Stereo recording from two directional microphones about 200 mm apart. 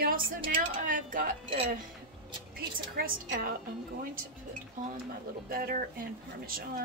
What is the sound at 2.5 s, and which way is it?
A woman's voice, 45° right (ahead or behind).